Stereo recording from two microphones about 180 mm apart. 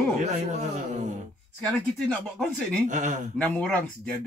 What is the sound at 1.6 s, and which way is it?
Speech, 5° left (ahead or behind).